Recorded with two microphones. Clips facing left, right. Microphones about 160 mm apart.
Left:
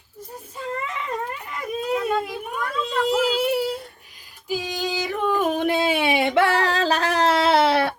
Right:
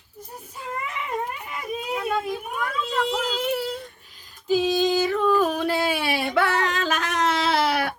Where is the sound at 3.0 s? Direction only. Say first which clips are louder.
Left 7 dB; 5° left (ahead or behind).